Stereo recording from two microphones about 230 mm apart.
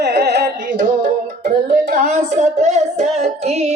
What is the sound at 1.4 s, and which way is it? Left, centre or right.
Child singing, right.